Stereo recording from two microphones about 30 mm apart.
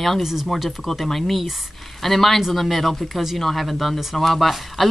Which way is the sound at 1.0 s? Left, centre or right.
Centre.